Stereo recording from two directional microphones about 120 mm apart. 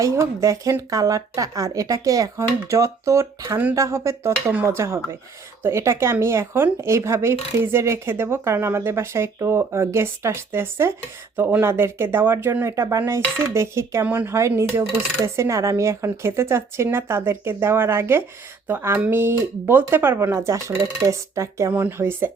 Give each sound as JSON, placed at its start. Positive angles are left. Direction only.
{"t": 0.0, "sound": "a woman's voice", "side_deg": -25}